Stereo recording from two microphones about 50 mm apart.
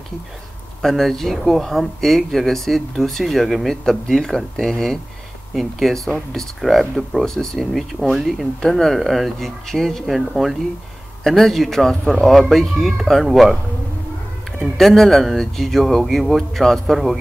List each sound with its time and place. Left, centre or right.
0.8 s speech: centre
5.5 s speech: centre
7.2 s speech: centre
7.7 s speech: centre
8.5 s speech: centre
10.0 s speech: centre
14.8 s speech: centre